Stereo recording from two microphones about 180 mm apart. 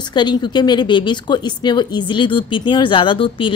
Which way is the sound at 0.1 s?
25° left (ahead or behind).